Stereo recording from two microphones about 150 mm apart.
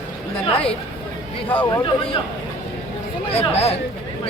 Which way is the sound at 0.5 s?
40° left (ahead or behind).